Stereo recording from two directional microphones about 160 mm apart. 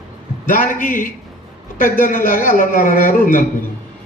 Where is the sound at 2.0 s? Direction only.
55° left (ahead or behind).